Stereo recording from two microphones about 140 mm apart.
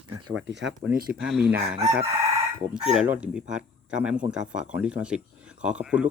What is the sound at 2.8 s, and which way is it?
Chicken, 5° right (ahead or behind).